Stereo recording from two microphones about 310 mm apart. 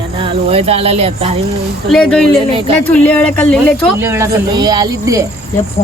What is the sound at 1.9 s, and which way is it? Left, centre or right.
Speech, centre.